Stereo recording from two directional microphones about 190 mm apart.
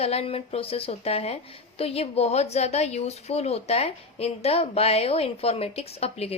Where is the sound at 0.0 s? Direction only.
30° left (ahead or behind).